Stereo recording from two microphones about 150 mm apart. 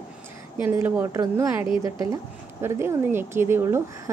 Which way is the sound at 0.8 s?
15° right (ahead or behind).